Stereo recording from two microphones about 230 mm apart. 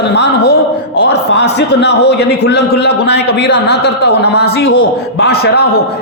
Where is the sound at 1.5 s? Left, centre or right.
Left.